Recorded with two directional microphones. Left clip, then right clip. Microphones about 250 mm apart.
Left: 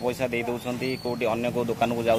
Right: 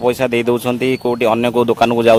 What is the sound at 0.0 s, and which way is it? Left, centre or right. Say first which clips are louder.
Speech: right 12 dB; right.